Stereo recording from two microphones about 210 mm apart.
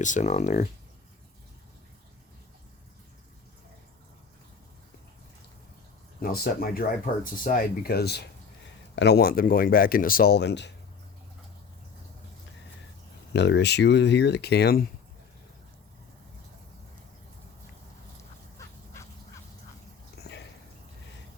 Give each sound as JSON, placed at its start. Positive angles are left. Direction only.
{"t": 0.0, "sound": "speech", "side_deg": 35}
{"t": 6.1, "sound": "speech", "side_deg": 45}
{"t": 13.3, "sound": "speech", "side_deg": 55}
{"t": 20.2, "sound": "a sound", "side_deg": 50}